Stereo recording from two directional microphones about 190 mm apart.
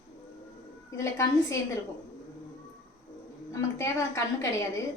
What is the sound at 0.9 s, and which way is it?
Speech, 15° left (ahead or behind).